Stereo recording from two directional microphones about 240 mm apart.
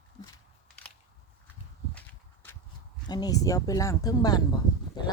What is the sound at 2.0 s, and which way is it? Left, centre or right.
Walk, centre.